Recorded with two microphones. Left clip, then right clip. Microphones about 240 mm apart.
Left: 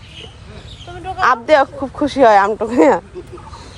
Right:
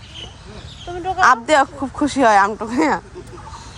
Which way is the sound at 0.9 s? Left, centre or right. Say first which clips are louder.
Right 3 dB; right.